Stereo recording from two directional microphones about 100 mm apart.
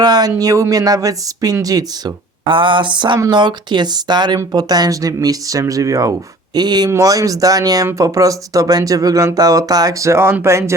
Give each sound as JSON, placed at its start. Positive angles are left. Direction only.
{"t": 0.0, "sound": "speech", "side_deg": -40}
{"t": 2.5, "sound": "speech", "side_deg": -55}